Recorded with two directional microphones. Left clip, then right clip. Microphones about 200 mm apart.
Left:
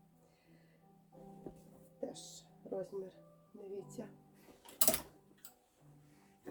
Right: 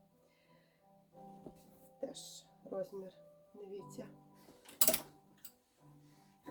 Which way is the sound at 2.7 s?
Centre (ahead or behind).